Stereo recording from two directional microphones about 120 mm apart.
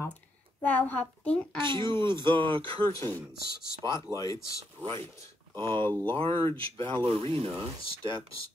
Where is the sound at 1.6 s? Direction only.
40° right (ahead or behind).